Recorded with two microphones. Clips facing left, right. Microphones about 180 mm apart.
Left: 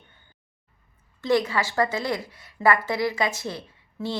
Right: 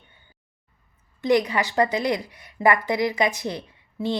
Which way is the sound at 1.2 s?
15° right (ahead or behind).